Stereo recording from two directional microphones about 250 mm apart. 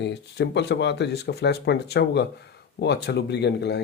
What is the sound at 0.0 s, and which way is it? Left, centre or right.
Speech, left.